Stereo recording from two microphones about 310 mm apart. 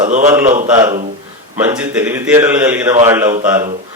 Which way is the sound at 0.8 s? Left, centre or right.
Centre.